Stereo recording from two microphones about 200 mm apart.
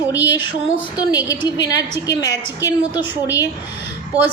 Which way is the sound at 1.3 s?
20° left (ahead or behind).